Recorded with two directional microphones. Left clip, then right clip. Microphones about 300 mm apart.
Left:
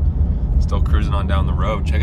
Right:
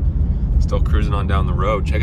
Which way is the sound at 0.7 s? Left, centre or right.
Centre.